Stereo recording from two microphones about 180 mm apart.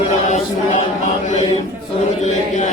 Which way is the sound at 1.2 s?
45° left (ahead or behind).